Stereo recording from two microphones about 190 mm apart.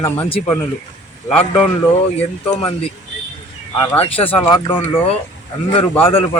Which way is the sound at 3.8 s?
30° left (ahead or behind).